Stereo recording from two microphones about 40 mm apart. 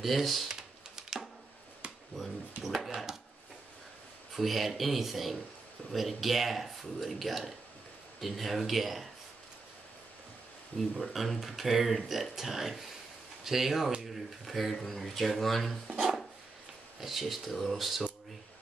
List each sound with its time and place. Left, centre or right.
0.0 s speech: centre
0.5 s typing: centre
2.1 s a sound: centre
4.4 s speech: centre
10.8 s speech: centre
17.0 s speech: centre